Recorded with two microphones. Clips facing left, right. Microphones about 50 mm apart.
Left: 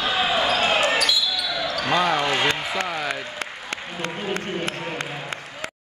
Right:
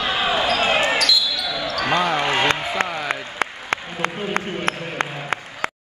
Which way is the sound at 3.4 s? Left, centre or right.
Right.